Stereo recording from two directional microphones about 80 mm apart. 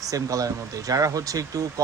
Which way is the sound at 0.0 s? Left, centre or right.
Right.